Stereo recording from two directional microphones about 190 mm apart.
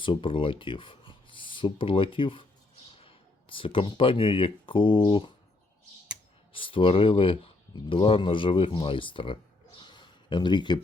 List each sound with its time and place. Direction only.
0.0 s speech: 25° left (ahead or behind)
6.5 s speech: 25° left (ahead or behind)